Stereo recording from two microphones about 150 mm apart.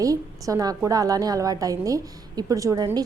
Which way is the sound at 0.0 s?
20° right (ahead or behind).